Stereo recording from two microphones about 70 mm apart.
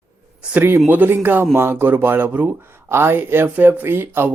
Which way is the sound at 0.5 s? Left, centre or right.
Right.